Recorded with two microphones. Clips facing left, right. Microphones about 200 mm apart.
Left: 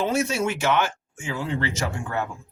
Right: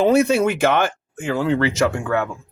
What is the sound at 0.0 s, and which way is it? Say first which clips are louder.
Speech: right 8 dB; 60° right (ahead or behind).